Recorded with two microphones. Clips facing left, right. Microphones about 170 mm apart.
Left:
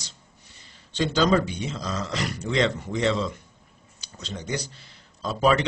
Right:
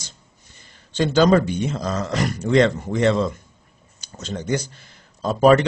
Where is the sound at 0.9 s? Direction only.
50° right (ahead or behind).